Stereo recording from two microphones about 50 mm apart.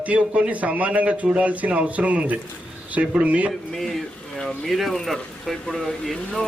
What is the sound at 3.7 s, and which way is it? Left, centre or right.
Speech, centre.